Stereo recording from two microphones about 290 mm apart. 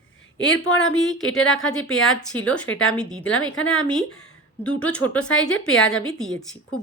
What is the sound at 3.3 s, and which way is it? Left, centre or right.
Speech, left.